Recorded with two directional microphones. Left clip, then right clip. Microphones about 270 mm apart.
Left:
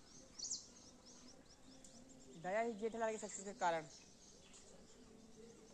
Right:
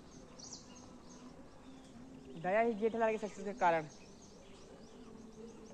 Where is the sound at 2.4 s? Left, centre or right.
Centre.